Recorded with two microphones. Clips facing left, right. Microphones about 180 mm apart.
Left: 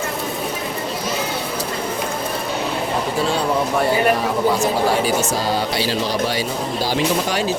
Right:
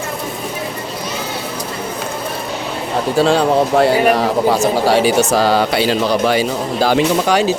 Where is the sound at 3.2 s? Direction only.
90° right.